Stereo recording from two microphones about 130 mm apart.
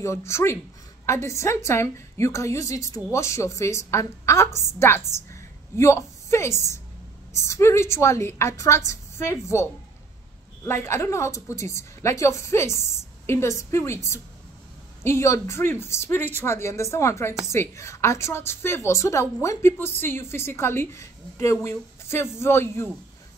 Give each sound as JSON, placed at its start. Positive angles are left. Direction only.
{"t": 0.0, "sound": "a woman's voice", "side_deg": 20}
{"t": 5.3, "sound": "a sound", "side_deg": 20}
{"t": 7.3, "sound": "a woman's voice", "side_deg": 20}